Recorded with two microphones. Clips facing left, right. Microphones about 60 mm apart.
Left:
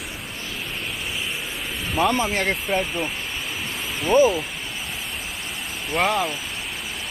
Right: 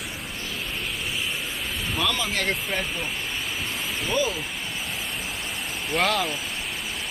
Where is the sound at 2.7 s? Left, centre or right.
Centre.